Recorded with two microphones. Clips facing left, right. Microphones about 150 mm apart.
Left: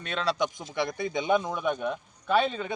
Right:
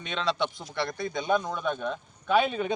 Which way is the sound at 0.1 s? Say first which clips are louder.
Left 1 dB; 5° left (ahead or behind).